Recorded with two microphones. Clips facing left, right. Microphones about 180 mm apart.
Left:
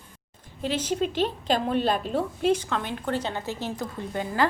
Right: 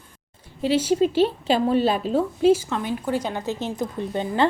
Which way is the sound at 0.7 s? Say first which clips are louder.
Right 7 dB; 10° right (ahead or behind).